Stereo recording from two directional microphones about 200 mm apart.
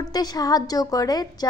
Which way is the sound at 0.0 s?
20° left (ahead or behind).